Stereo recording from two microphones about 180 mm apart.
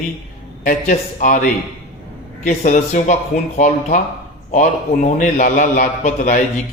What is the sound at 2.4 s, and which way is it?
A man's voice, 45° left (ahead or behind).